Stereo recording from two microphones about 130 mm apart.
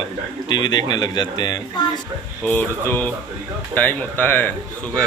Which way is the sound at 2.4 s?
15° left (ahead or behind).